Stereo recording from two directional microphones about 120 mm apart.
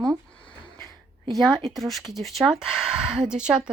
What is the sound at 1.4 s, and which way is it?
Speech, 35° right (ahead or behind).